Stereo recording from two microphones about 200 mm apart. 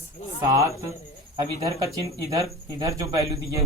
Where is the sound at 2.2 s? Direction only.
20° right (ahead or behind).